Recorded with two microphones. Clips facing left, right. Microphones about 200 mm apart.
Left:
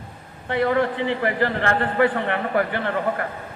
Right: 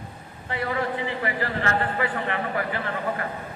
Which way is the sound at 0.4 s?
60° left (ahead or behind).